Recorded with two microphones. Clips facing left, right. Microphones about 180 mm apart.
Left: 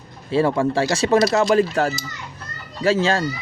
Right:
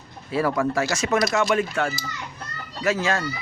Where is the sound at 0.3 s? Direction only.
30° left (ahead or behind).